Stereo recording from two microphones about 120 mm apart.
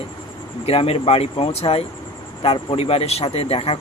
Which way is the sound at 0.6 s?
55° left (ahead or behind).